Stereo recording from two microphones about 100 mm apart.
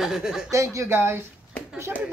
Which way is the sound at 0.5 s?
30° right (ahead or behind).